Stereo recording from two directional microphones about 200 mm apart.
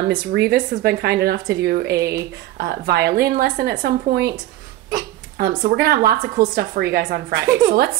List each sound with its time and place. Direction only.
0.1 s speech: 55° right (ahead or behind)
5.4 s speech: 50° right (ahead or behind)